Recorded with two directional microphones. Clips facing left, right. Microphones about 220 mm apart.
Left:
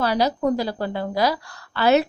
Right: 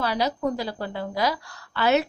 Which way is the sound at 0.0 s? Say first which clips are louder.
Left 4 dB; 40° left (ahead or behind).